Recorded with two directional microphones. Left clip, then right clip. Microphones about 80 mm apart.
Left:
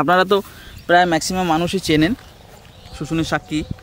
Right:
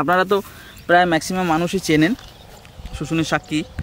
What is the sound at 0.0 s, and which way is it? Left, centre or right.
Speech, left.